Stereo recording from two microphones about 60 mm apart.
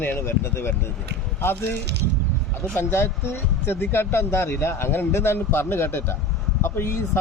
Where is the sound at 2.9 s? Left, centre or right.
Left.